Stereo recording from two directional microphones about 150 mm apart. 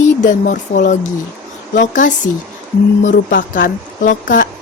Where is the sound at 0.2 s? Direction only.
60° left (ahead or behind).